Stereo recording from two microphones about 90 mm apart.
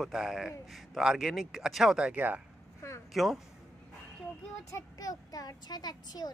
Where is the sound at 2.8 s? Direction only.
30° left (ahead or behind).